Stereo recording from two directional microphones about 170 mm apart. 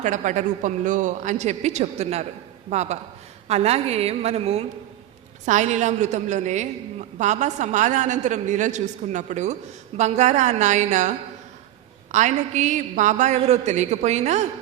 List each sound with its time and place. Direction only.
0.0 s a woman's voice: 45° right (ahead or behind)
12.1 s a woman's voice: 45° right (ahead or behind)